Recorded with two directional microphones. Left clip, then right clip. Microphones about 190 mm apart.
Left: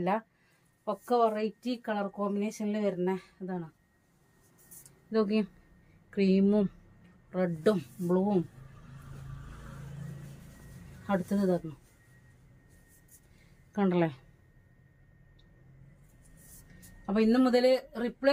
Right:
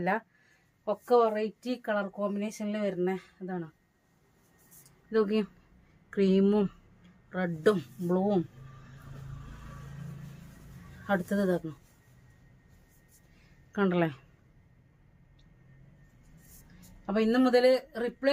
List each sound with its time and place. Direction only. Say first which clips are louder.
0.9 s speech: right 2 dB; 20° right (ahead or behind)
5.1 s speech: right 2 dB; 25° right (ahead or behind)
11.0 s speech: right 2 dB; 20° right (ahead or behind)
13.7 s speech: right 1 dB; 25° right (ahead or behind)
17.1 s speech: right 1 dB; 25° right (ahead or behind)